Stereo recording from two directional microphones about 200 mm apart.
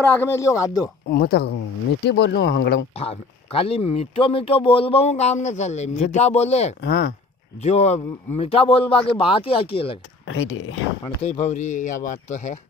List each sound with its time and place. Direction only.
0.0 s speech: 10° left (ahead or behind)
1.0 s speech: 50° left (ahead or behind)
3.0 s speech: 30° left (ahead or behind)
6.8 s speech: 60° left (ahead or behind)
7.6 s speech: 35° left (ahead or behind)
10.2 s speech: 75° left (ahead or behind)
11.2 s speech: 35° left (ahead or behind)